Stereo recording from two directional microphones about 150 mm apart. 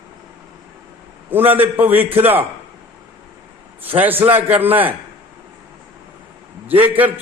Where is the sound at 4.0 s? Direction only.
15° right (ahead or behind).